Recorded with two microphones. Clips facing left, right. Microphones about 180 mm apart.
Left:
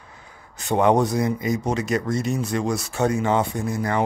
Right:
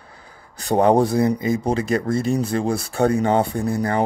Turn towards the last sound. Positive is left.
turn(degrees=-35)  # may be behind; listen again after turning